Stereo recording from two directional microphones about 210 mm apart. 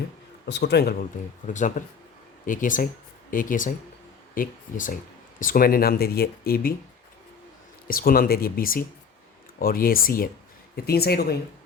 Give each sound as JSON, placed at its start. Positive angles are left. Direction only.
{"t": 0.4, "sound": "speech", "side_deg": 55}
{"t": 1.5, "sound": "speech", "side_deg": 35}
{"t": 7.9, "sound": "speech", "side_deg": 45}